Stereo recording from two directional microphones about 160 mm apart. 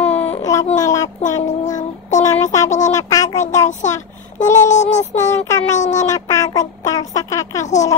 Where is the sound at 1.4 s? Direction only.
50° left (ahead or behind).